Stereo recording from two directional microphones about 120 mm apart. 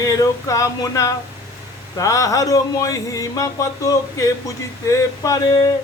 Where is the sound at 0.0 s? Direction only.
25° left (ahead or behind).